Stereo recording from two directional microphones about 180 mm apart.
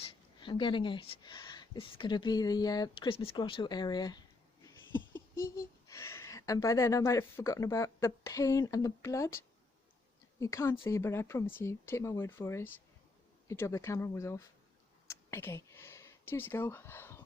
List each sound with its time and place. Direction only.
0.0 s speech: 25° left (ahead or behind)
4.6 s speech: 10° left (ahead or behind)
10.4 s speech: 15° left (ahead or behind)
15.0 s a sound: 15° left (ahead or behind)